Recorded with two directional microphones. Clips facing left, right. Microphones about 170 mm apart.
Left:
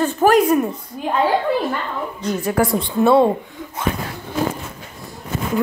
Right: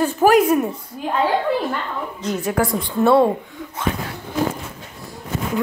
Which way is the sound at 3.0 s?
15° left (ahead or behind).